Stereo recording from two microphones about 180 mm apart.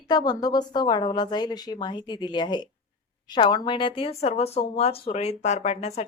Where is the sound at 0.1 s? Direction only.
20° left (ahead or behind).